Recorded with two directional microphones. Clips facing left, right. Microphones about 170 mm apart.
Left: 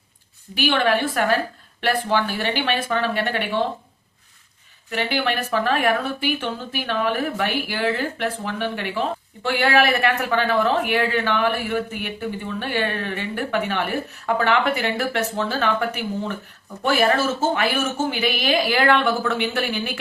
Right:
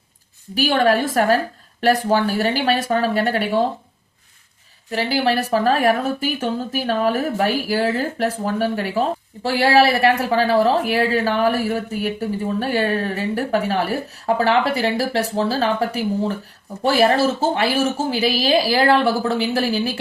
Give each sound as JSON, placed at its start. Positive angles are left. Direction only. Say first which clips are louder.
{"t": 0.5, "sound": "speech", "louder": "right 3 dB", "side_deg": -40}
{"t": 4.9, "sound": "speech", "louder": "right 4 dB", "side_deg": -35}